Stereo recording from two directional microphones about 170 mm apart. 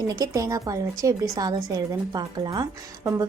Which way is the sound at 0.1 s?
20° right (ahead or behind).